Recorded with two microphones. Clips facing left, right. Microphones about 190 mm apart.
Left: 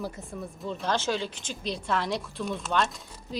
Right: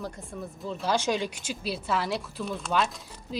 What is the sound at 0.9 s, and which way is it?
A woman's voice, 15° right (ahead or behind).